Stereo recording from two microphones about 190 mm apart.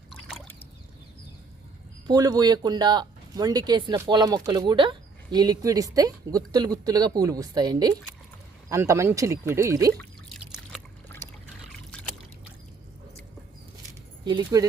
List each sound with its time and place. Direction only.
0.1 s trickle: centre (ahead or behind)
2.0 s speech: 20° right (ahead or behind)
10.4 s a sound: centre (ahead or behind)
14.3 s speech: 20° right (ahead or behind)